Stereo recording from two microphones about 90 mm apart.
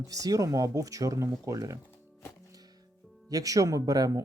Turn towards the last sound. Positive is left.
turn(degrees=-45)  # may be behind; listen again after turning